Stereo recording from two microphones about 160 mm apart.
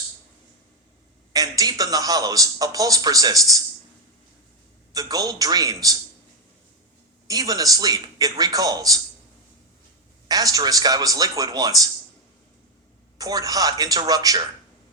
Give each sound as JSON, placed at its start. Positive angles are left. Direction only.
{"t": 1.3, "sound": "a man's voice", "side_deg": -25}
{"t": 4.9, "sound": "a man's voice", "side_deg": -25}
{"t": 7.3, "sound": "a man's voice", "side_deg": -25}
{"t": 10.2, "sound": "a man's voice", "side_deg": -25}
{"t": 13.1, "sound": "a man's voice", "side_deg": -20}